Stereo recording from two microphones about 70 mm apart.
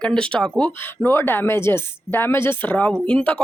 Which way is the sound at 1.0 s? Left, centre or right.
Left.